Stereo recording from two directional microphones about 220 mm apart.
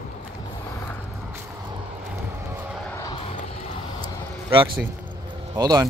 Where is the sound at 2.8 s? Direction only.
15° left (ahead or behind).